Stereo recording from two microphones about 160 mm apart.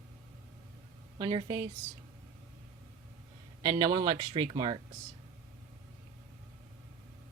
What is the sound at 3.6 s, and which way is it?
Speech, 20° right (ahead or behind).